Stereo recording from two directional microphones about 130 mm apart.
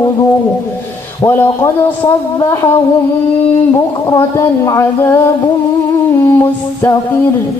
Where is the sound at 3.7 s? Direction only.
25° left (ahead or behind).